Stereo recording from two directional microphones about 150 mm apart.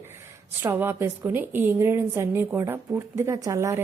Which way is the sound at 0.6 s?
15° right (ahead or behind).